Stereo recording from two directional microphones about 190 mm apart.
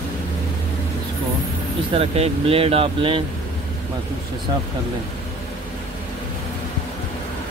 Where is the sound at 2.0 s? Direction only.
30° right (ahead or behind).